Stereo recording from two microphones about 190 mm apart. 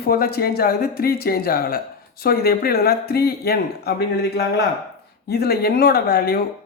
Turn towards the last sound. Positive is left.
turn(degrees=50)  # may be behind; listen again after turning